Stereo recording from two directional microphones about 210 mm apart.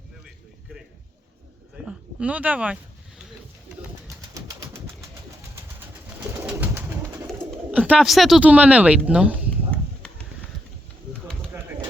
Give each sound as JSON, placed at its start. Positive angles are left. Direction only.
{"t": 1.9, "sound": "speech", "side_deg": -5}
{"t": 4.4, "sound": "bird", "side_deg": -15}
{"t": 5.8, "sound": "bird", "side_deg": -10}
{"t": 7.3, "sound": "speech", "side_deg": -5}